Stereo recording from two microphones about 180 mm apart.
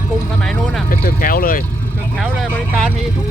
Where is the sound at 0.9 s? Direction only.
50° left (ahead or behind).